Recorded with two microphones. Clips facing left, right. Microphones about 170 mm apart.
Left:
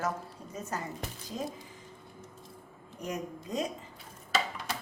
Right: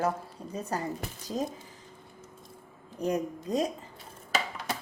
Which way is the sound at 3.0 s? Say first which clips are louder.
Right 7 dB; 35° right (ahead or behind).